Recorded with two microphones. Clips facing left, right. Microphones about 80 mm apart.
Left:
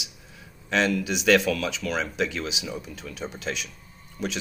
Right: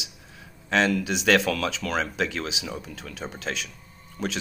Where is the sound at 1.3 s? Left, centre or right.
Right.